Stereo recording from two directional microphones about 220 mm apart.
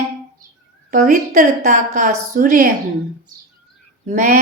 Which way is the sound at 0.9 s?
40° right (ahead or behind).